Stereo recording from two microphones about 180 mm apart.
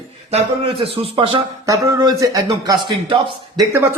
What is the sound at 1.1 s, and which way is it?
Speech, 30° right (ahead or behind).